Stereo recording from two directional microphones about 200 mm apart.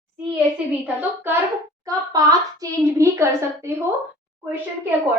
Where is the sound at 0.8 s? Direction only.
10° right (ahead or behind).